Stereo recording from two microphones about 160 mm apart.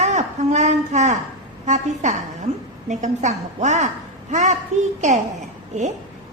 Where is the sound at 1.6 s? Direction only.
45° right (ahead or behind).